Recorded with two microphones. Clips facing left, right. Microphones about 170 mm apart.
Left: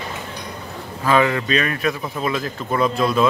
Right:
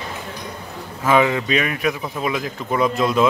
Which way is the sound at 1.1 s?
15° right (ahead or behind).